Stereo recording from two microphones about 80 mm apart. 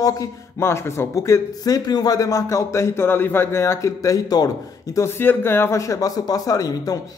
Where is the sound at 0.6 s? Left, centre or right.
Left.